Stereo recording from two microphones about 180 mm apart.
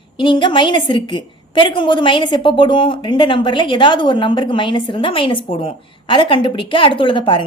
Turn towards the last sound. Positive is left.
turn(degrees=30)  # may be behind; listen again after turning